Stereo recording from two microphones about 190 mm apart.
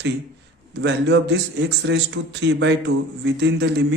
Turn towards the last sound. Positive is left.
turn(degrees=-65)  # may be behind; listen again after turning